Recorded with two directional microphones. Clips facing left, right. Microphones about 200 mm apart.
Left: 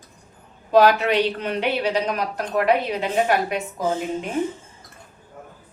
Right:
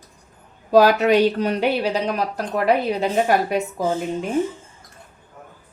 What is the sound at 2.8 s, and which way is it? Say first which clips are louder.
Speech: right 2 dB; 40° right (ahead or behind).